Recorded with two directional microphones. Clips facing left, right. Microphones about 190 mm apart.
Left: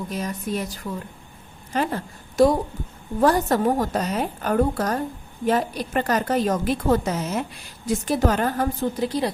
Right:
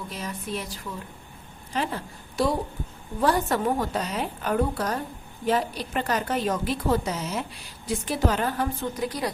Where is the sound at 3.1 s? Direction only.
45° left (ahead or behind).